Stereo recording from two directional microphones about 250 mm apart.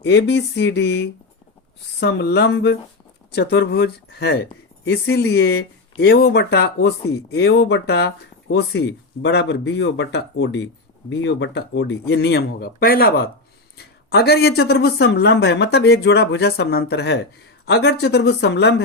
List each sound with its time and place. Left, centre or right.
0.0 s speech: left